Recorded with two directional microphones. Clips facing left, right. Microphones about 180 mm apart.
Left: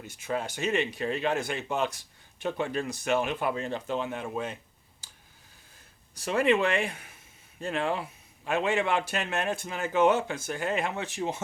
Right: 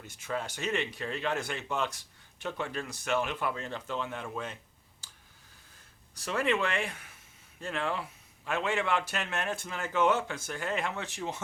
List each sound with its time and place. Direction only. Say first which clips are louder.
0.0 s a man's voice: left 4 dB; 15° left (ahead or behind)
6.2 s a man's voice: left 5 dB; 15° left (ahead or behind)